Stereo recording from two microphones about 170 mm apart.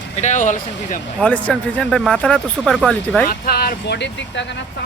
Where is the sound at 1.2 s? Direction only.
5° left (ahead or behind).